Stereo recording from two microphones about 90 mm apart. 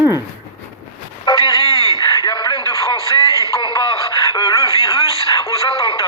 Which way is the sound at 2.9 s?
60° left (ahead or behind).